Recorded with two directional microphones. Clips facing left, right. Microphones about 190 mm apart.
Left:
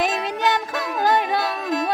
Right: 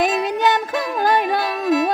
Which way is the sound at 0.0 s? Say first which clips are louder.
Right 4 dB; 50° right (ahead or behind).